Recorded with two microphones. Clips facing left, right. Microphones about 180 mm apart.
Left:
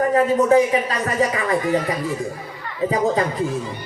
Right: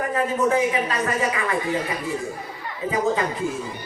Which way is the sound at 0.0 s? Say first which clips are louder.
Left 5 dB; 35° left (ahead or behind).